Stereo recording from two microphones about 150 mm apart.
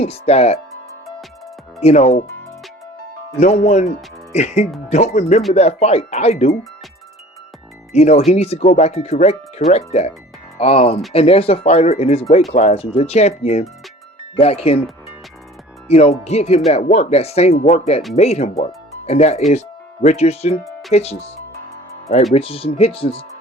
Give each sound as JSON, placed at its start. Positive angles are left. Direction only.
{"t": 0.0, "sound": "speech", "side_deg": 45}
{"t": 1.8, "sound": "speech", "side_deg": 45}
{"t": 3.4, "sound": "speech", "side_deg": 50}
{"t": 7.9, "sound": "speech", "side_deg": 45}
{"t": 15.9, "sound": "speech", "side_deg": 45}
{"t": 22.4, "sound": "speech", "side_deg": 40}